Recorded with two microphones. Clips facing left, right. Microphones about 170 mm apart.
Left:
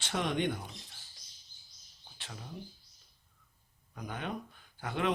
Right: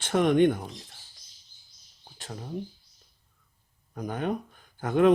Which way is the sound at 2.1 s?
45° right (ahead or behind).